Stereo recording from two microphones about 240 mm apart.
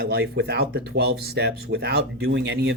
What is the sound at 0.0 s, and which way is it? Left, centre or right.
Speech, right.